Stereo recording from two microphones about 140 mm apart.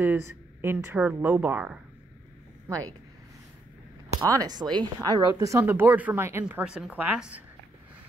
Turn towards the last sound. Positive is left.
turn(degrees=-10)  # may be behind; listen again after turning